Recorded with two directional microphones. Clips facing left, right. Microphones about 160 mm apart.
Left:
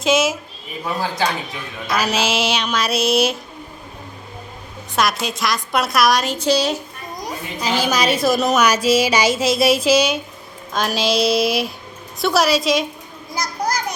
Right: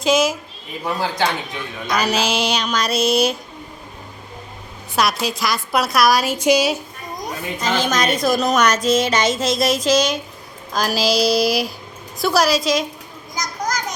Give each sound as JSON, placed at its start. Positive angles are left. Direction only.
{"t": 0.0, "sound": "speech", "side_deg": 0}
{"t": 4.9, "sound": "speech", "side_deg": 0}
{"t": 7.6, "sound": "a woman's voice", "side_deg": 10}
{"t": 13.3, "sound": "children playing", "side_deg": 30}